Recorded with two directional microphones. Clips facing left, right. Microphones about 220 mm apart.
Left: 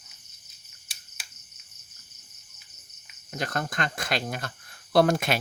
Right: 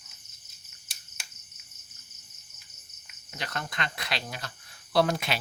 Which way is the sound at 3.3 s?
45° left (ahead or behind).